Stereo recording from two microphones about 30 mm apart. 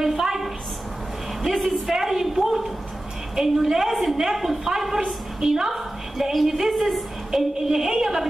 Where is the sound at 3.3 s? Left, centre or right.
Centre.